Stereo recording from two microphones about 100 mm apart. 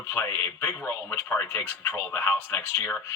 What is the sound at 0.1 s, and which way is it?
Speech, 25° left (ahead or behind).